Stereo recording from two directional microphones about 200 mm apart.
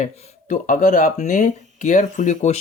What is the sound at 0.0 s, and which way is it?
Speech, 40° left (ahead or behind).